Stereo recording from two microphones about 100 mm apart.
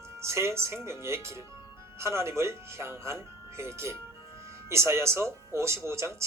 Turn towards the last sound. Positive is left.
turn(degrees=-30)  # may be behind; listen again after turning